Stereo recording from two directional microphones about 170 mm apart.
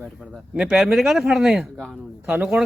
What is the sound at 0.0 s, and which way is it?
Speech, 5° right (ahead or behind).